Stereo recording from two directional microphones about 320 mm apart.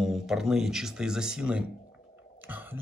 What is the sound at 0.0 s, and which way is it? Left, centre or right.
Speech, centre.